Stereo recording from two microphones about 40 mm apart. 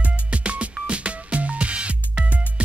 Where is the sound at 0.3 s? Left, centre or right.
Right.